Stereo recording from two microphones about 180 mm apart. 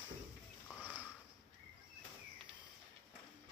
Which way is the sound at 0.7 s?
10° right (ahead or behind).